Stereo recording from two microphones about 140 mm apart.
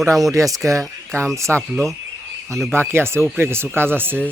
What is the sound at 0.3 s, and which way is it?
Speech, 25° right (ahead or behind).